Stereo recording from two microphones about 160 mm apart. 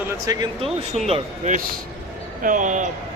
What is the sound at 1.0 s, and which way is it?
Speech, 45° right (ahead or behind).